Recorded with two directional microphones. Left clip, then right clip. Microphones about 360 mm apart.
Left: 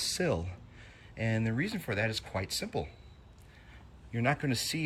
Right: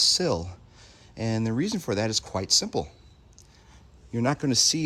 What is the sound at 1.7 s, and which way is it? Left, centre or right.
Speech, right.